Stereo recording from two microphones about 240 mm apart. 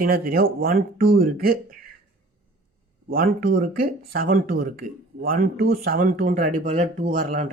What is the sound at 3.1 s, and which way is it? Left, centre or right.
Speech, right.